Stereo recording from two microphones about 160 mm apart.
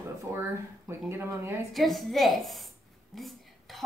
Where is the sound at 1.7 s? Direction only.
Centre (ahead or behind).